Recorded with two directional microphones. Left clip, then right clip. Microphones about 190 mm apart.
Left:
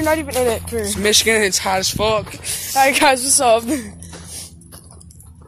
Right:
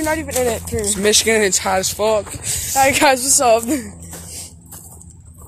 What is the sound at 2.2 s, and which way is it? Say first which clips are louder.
A woman's voice: right 2 dB; 5° left (ahead or behind).